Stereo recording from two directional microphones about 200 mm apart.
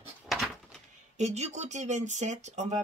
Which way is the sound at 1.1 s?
35° right (ahead or behind).